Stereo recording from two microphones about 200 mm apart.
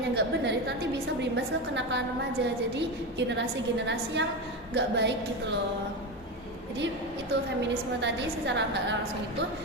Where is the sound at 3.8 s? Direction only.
60° right (ahead or behind).